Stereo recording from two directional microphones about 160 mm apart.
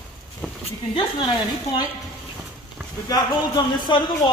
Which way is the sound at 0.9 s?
30° left (ahead or behind).